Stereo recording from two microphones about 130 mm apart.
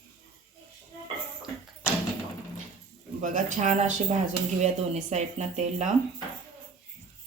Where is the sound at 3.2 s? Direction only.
75° right (ahead or behind).